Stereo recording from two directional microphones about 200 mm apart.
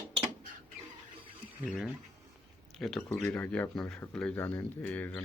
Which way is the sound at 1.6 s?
5° left (ahead or behind).